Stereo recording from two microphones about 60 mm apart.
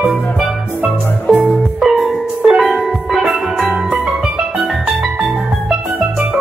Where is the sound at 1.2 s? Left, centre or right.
Left.